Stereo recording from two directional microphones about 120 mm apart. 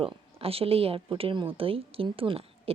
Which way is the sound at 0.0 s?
55° right (ahead or behind).